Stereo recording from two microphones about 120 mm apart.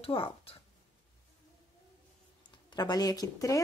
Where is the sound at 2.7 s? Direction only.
35° left (ahead or behind).